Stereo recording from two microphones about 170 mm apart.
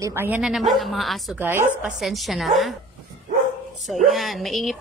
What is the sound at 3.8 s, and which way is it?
Speech, centre (ahead or behind).